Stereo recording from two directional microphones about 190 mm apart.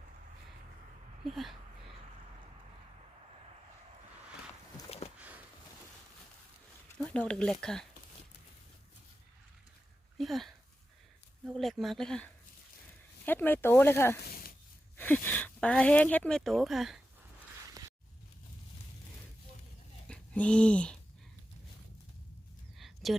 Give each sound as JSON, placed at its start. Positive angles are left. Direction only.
{"t": 1.2, "sound": "speech", "side_deg": 0}
{"t": 7.0, "sound": "speech", "side_deg": 5}
{"t": 10.2, "sound": "a sound", "side_deg": 0}
{"t": 11.4, "sound": "speech", "side_deg": 0}
{"t": 14.3, "sound": "a sound", "side_deg": 50}
{"t": 14.9, "sound": "speech", "side_deg": 10}
{"t": 20.1, "sound": "speech", "side_deg": 5}